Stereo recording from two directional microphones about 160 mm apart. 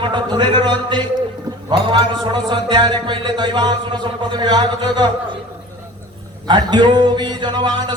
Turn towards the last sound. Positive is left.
turn(degrees=-30)  # may be behind; listen again after turning